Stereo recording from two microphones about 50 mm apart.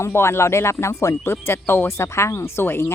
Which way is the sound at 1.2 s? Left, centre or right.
Left.